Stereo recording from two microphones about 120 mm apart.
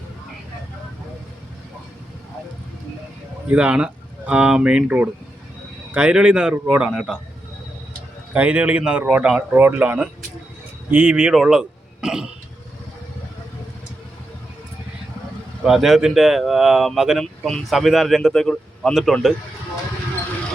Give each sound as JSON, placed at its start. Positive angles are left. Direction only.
{"t": 3.5, "sound": "a man's voice", "side_deg": -10}
{"t": 8.3, "sound": "a man's voice", "side_deg": -10}
{"t": 15.6, "sound": "a man's voice", "side_deg": -5}